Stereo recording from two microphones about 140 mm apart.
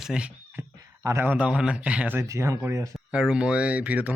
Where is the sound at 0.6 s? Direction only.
20° right (ahead or behind).